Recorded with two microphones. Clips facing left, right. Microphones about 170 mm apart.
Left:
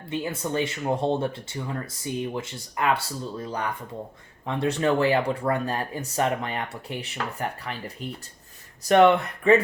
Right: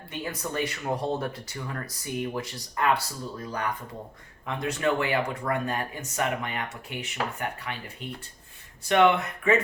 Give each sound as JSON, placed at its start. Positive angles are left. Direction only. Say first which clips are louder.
{"t": 0.1, "sound": "speech", "louder": "left 5 dB", "side_deg": 25}
{"t": 4.4, "sound": "speech", "louder": "left 3 dB", "side_deg": 30}
{"t": 8.8, "sound": "speech", "louder": "left 4 dB", "side_deg": 40}